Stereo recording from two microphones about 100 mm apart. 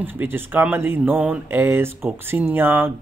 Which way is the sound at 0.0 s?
20° right (ahead or behind).